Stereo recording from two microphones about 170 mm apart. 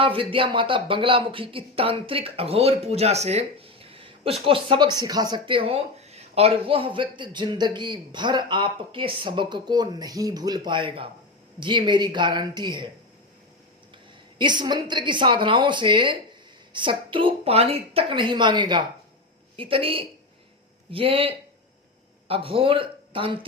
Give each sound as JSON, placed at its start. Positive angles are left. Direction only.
{"t": 0.0, "sound": "speech", "side_deg": -30}
{"t": 14.3, "sound": "speech", "side_deg": -25}